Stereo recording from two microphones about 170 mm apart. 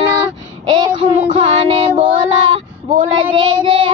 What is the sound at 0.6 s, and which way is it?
Child singing, 25° right (ahead or behind).